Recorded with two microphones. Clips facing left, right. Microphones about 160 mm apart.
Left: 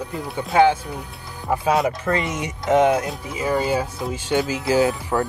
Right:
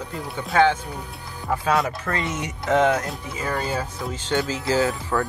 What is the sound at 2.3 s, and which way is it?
Speech, 10° left (ahead or behind).